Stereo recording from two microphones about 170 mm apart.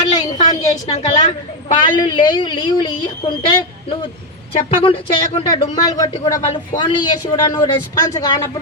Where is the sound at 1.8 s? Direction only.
30° left (ahead or behind).